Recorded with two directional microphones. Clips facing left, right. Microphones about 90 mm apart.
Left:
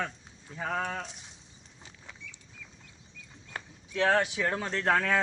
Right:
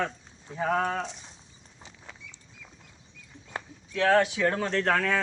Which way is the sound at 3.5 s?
20° right (ahead or behind).